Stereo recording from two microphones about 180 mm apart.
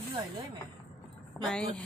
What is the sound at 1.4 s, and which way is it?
Speech, 5° left (ahead or behind).